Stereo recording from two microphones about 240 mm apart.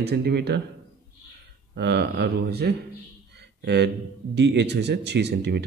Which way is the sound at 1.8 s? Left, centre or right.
Right.